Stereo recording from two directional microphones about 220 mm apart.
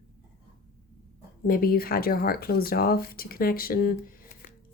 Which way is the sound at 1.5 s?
40° left (ahead or behind).